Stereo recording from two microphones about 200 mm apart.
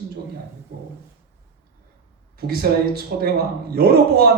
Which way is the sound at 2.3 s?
50° right (ahead or behind).